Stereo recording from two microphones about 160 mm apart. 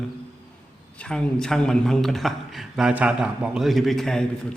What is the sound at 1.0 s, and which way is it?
Speech, 5° left (ahead or behind).